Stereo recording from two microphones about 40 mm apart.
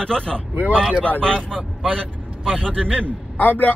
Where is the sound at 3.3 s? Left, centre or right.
Left.